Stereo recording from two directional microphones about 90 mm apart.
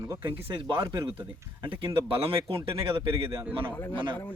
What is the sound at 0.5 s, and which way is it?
Speech, 65° right (ahead or behind).